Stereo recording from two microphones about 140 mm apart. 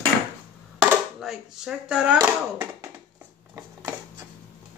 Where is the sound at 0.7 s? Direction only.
5° right (ahead or behind).